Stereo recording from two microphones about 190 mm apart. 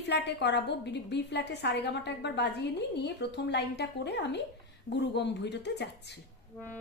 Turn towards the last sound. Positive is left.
turn(degrees=65)  # may be behind; listen again after turning